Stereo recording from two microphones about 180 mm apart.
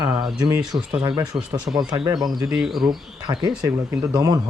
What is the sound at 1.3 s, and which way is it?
Speech, 25° right (ahead or behind).